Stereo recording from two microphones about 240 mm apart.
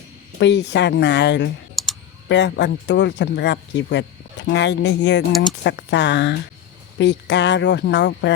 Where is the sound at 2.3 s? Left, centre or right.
Left.